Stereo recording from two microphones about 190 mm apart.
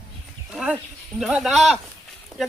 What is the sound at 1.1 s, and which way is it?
Speech, centre (ahead or behind).